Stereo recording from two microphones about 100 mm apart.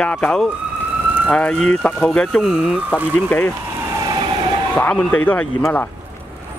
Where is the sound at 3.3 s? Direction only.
15° left (ahead or behind).